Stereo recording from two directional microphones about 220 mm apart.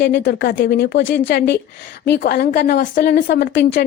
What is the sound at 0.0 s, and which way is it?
Speech, 50° left (ahead or behind).